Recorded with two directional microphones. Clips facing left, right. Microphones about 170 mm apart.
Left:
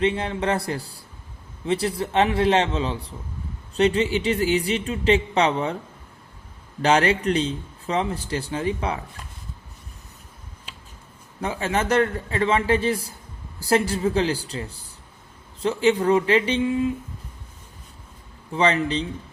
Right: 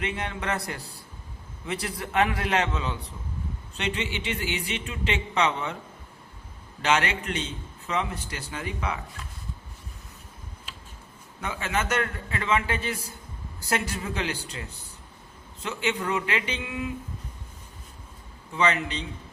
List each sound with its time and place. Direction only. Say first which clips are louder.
0.0 s a man's voice: left 8 dB; 30° left (ahead or behind)
6.8 s speech: left 6 dB; 35° left (ahead or behind)
11.3 s speech: left 5 dB; 35° left (ahead or behind)
18.5 s speech: left 5 dB; 35° left (ahead or behind)